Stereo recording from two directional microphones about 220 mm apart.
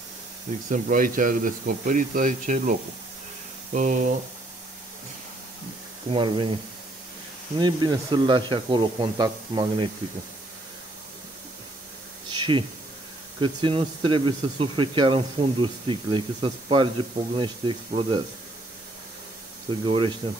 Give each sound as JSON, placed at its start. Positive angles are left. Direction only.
{"t": 0.7, "sound": "speech", "side_deg": -35}
{"t": 6.0, "sound": "speech", "side_deg": -25}
{"t": 7.5, "sound": "speech", "side_deg": -20}
{"t": 12.3, "sound": "a sound", "side_deg": -20}
{"t": 13.4, "sound": "speech", "side_deg": -20}
{"t": 19.8, "sound": "speech", "side_deg": -20}